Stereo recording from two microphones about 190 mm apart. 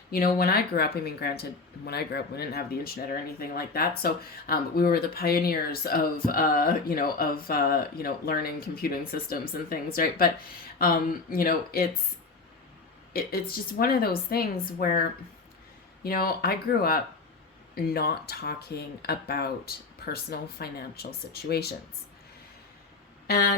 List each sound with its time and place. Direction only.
0.1 s speech: 50° left (ahead or behind)
13.1 s speech: 55° left (ahead or behind)
23.2 s a sound: 55° left (ahead or behind)